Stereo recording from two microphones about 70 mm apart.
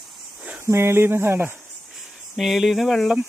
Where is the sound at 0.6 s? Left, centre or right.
Right.